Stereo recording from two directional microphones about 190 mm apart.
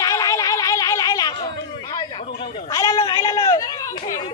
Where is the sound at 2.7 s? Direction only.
20° left (ahead or behind).